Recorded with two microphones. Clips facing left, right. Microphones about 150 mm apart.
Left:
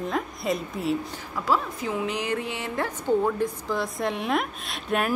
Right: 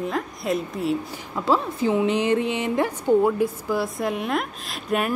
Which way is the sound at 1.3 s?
25° right (ahead or behind).